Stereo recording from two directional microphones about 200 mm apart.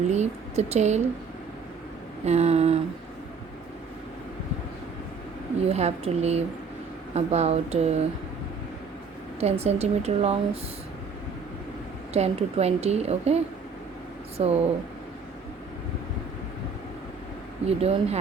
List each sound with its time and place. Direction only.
0.1 s a woman's voice: 35° right (ahead or behind)
2.2 s a woman's voice: 35° right (ahead or behind)
5.6 s a woman's voice: 30° right (ahead or behind)
9.4 s a woman's voice: 30° right (ahead or behind)
12.1 s a woman's voice: 30° right (ahead or behind)
17.7 s a woman's voice: 30° right (ahead or behind)